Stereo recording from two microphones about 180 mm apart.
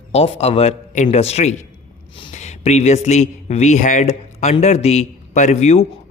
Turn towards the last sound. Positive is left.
turn(degrees=40)  # may be behind; listen again after turning